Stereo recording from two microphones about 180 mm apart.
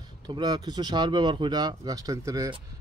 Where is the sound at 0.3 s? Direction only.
25° right (ahead or behind).